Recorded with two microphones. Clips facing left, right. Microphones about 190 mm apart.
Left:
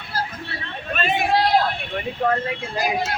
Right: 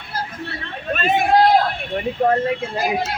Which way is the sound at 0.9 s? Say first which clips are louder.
Right 4 dB; 45° right (ahead or behind).